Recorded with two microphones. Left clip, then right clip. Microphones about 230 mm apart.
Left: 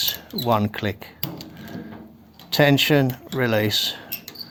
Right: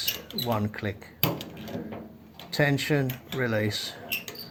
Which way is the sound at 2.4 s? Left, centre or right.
Left.